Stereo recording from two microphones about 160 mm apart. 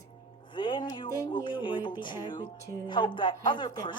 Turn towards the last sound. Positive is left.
turn(degrees=30)  # may be behind; listen again after turning